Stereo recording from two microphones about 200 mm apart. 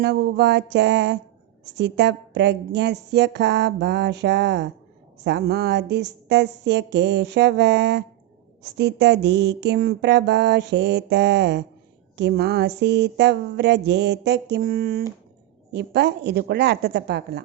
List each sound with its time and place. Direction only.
0.0 s speech: 55° right (ahead or behind)